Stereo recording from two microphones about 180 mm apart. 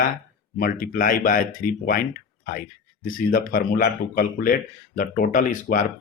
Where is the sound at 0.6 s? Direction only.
50° left (ahead or behind).